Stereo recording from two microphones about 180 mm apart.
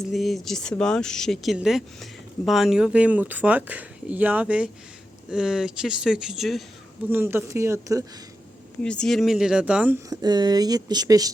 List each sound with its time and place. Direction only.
0.1 s speech: centre (ahead or behind)
7.1 s speech: 10° right (ahead or behind)
8.8 s speech: 5° left (ahead or behind)
10.1 s speech: 20° right (ahead or behind)